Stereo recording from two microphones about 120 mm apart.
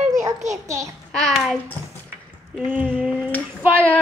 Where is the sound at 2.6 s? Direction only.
15° right (ahead or behind).